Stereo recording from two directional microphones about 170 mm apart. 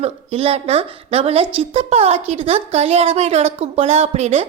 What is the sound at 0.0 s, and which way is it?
A woman's voice, 35° right (ahead or behind).